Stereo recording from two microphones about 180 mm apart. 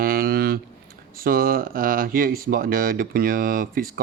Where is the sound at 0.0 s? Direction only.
55° right (ahead or behind).